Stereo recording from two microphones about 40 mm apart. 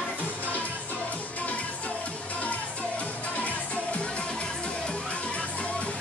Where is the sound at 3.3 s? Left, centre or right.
Left.